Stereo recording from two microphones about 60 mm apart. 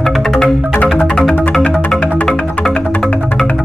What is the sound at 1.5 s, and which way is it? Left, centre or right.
Music, left.